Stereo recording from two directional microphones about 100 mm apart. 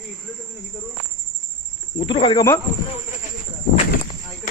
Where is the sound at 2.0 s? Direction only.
65° left (ahead or behind).